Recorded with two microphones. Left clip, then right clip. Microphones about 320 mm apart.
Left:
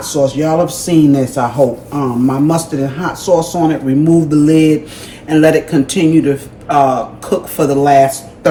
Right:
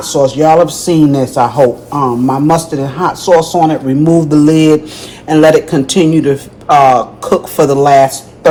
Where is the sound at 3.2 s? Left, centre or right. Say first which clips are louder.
Right 4 dB; centre.